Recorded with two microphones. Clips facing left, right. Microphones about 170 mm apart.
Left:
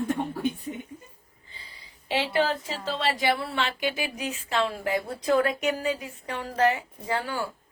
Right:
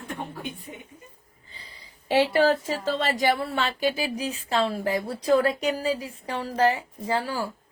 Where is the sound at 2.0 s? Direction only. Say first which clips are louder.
Right 5 dB; 45° right (ahead or behind).